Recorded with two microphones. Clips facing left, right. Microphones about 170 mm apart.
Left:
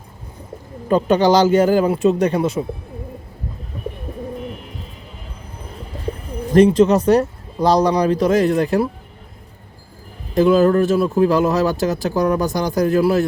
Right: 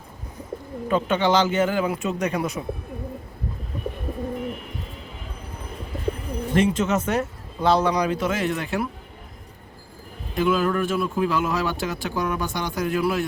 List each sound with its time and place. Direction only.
0.9 s speech: 40° left (ahead or behind)
6.5 s speech: 35° left (ahead or behind)
10.3 s speech: 40° left (ahead or behind)